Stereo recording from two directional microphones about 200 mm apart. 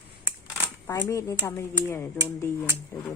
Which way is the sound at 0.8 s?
15° left (ahead or behind).